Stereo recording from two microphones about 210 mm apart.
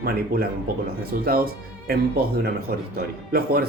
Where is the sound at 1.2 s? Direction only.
45° right (ahead or behind).